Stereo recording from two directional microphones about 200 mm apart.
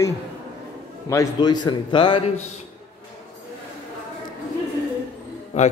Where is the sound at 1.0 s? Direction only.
20° left (ahead or behind).